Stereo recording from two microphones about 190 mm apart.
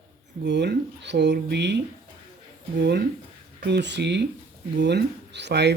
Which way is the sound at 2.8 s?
60° right (ahead or behind).